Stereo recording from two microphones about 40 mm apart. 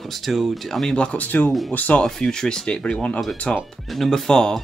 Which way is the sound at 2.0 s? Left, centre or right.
Centre.